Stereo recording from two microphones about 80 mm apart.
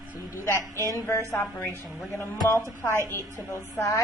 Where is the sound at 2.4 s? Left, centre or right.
Left.